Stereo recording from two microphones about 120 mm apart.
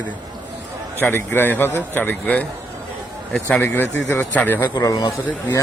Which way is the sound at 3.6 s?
20° left (ahead or behind).